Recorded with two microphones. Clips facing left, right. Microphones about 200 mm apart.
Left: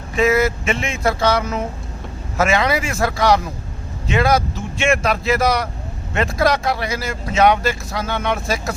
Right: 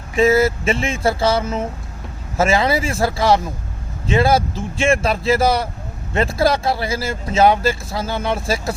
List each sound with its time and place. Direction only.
0.2 s speech: 30° right (ahead or behind)